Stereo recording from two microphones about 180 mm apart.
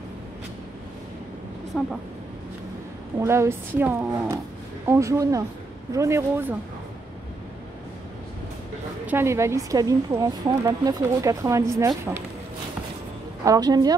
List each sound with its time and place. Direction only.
1.7 s speech: centre (ahead or behind)
3.2 s speech: 15° right (ahead or behind)
9.0 s speech: 15° right (ahead or behind)
13.4 s a woman's voice: 20° right (ahead or behind)